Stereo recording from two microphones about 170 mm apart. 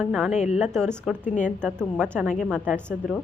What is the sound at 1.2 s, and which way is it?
Speech, 45° left (ahead or behind).